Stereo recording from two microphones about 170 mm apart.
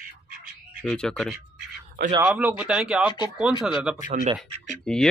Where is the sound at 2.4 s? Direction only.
10° right (ahead or behind).